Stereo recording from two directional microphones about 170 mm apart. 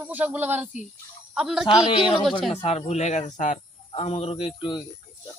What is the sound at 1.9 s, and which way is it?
Speech, 30° left (ahead or behind).